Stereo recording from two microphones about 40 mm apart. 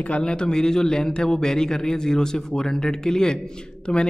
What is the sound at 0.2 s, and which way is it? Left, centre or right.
A man's voice, left.